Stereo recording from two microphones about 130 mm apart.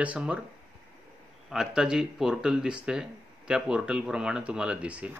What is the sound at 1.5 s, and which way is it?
Speech, 5° right (ahead or behind).